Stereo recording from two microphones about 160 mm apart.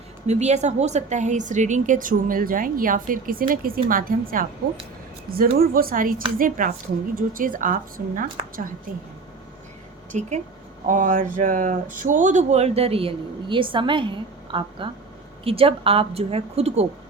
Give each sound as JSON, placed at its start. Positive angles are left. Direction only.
{"t": 0.3, "sound": "a woman's voice", "side_deg": -45}
{"t": 10.1, "sound": "a woman's voice", "side_deg": -45}